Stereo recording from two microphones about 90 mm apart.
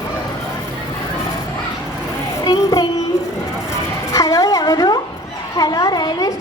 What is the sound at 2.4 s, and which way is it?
Speech, 40° left (ahead or behind).